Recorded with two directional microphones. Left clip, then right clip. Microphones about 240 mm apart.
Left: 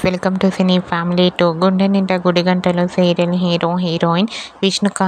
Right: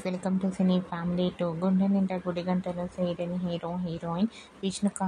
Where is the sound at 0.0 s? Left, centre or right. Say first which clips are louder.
Left 15 dB; left.